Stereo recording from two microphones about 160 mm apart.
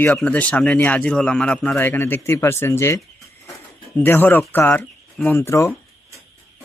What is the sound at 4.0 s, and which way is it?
Speech, 10° left (ahead or behind).